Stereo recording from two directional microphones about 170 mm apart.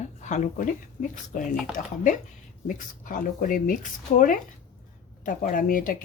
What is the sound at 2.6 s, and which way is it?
A woman's voice, 50° left (ahead or behind).